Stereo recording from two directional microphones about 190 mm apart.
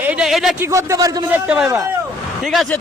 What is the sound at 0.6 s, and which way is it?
Speech, 15° right (ahead or behind).